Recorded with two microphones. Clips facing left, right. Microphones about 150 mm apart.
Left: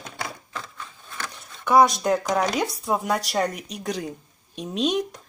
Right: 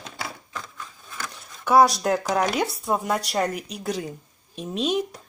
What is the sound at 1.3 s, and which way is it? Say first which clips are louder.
Speech: even; centre (ahead or behind).